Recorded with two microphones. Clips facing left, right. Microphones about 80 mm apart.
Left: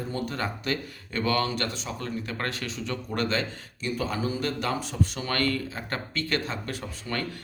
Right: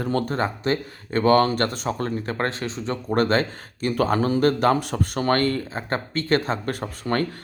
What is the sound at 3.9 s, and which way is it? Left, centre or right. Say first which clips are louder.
Speech: right 9 dB; right.